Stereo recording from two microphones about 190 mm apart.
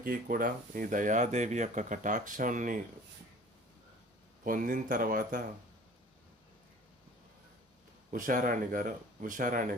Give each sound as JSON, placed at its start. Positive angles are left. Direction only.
{"t": 0.0, "sound": "speech", "side_deg": -45}
{"t": 4.4, "sound": "speech", "side_deg": -45}
{"t": 8.1, "sound": "speech", "side_deg": -45}